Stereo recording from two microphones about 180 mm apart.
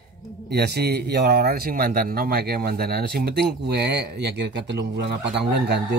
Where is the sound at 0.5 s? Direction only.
65° right (ahead or behind).